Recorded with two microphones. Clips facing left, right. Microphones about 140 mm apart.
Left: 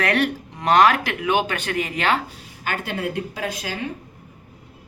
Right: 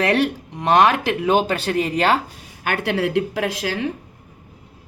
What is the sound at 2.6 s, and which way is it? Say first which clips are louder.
Speech: right 5 dB; 70° right (ahead or behind).